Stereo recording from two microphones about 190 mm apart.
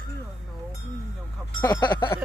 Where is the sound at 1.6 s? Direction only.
20° left (ahead or behind).